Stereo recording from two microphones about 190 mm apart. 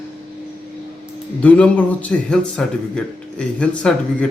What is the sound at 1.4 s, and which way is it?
A man's voice, 5° left (ahead or behind).